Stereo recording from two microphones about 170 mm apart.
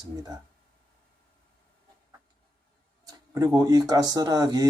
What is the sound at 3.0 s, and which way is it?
Speech, 20° right (ahead or behind).